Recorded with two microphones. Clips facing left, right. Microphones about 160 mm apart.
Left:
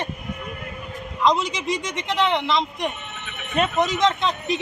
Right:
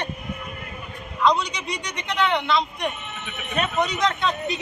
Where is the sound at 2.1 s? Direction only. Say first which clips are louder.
Even; 25° left (ahead or behind).